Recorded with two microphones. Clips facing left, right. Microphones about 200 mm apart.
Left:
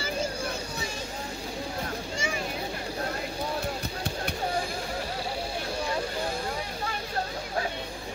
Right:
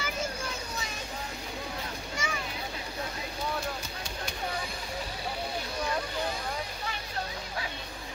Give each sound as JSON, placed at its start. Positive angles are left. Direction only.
{"t": 2.1, "sound": "vehicle", "side_deg": 30}